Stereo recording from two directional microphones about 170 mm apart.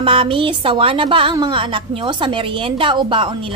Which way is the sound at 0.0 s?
30° right (ahead or behind).